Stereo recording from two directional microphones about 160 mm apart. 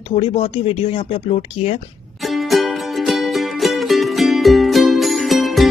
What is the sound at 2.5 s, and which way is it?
Music, centre (ahead or behind).